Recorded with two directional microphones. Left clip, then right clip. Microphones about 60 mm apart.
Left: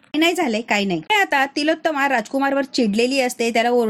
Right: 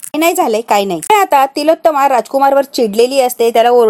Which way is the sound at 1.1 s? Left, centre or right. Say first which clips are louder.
Right 9 dB; right.